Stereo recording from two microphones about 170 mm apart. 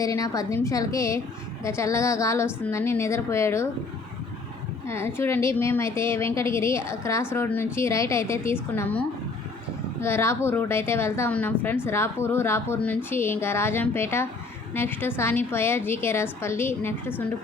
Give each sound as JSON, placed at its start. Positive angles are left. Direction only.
{"t": 0.0, "sound": "a woman's voice", "side_deg": 20}
{"t": 4.9, "sound": "a woman's voice", "side_deg": 15}